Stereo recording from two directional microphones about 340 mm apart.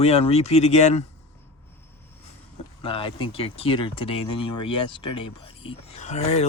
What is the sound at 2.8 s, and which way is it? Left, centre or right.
Speech, centre.